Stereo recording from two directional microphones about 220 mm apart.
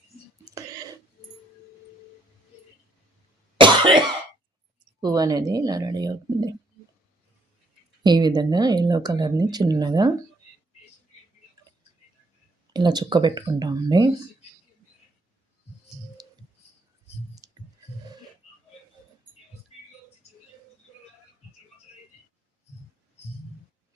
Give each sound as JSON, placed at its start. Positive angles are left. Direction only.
{"t": 0.5, "sound": "whispering", "side_deg": -15}
{"t": 3.6, "sound": "cough", "side_deg": -20}
{"t": 5.0, "sound": "speech", "side_deg": -15}
{"t": 8.0, "sound": "speech", "side_deg": -20}
{"t": 12.7, "sound": "speech", "side_deg": -20}
{"t": 17.4, "sound": "clicking", "side_deg": -15}